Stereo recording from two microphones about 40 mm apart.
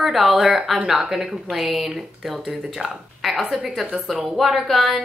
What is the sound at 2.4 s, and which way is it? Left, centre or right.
Speech, centre.